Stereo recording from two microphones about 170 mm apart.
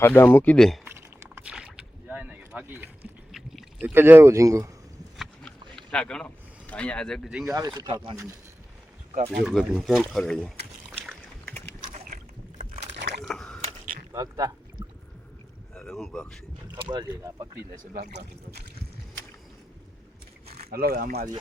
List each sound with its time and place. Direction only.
0.0 s speech: 10° left (ahead or behind)
0.9 s boat: 15° right (ahead or behind)
3.3 s a sound: centre (ahead or behind)
3.9 s speech: 15° right (ahead or behind)
5.1 s a sound: centre (ahead or behind)
7.5 s speech: 20° right (ahead or behind)
9.4 s speech: 5° right (ahead or behind)
10.9 s boat: 5° left (ahead or behind)
13.2 s biting: 5° left (ahead or behind)
14.1 s pour: 20° right (ahead or behind)
15.7 s speech: 5° left (ahead or behind)
16.8 s speech: 25° right (ahead or behind)
20.6 s speech: 65° right (ahead or behind)